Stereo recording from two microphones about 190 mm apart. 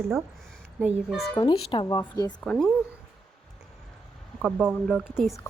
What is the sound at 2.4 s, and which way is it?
Speech, 5° left (ahead or behind).